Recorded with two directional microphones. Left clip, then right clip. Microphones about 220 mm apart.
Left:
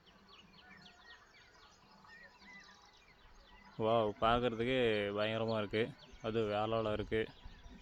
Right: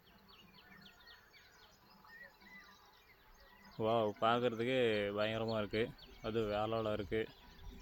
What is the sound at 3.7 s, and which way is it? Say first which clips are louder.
Speech: left 2 dB; 15° left (ahead or behind).